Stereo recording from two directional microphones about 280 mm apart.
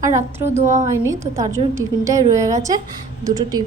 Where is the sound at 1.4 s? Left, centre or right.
Centre.